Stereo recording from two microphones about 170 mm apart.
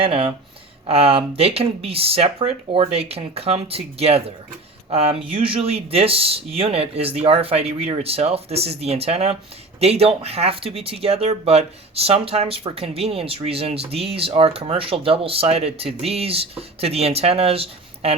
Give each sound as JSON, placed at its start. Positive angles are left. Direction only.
{"t": 0.0, "sound": "speech", "side_deg": -35}